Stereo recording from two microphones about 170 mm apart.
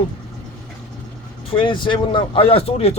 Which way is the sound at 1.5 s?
30° left (ahead or behind).